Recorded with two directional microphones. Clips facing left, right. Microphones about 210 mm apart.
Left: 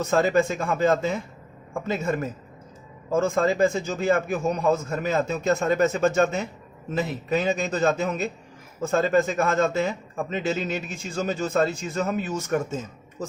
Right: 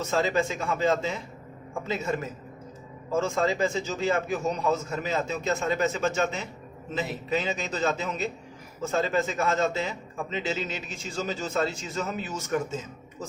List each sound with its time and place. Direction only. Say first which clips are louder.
0.0 s a man's voice: left 5 dB; 50° left (ahead or behind)
3.2 s a man's voice: left 4 dB; 50° left (ahead or behind)